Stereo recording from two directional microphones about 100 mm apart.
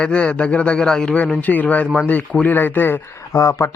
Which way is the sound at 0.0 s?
10° left (ahead or behind).